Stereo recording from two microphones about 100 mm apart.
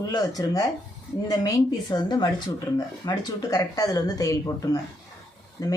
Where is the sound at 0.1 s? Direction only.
40° left (ahead or behind).